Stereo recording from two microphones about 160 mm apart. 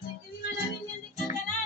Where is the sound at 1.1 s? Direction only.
50° left (ahead or behind).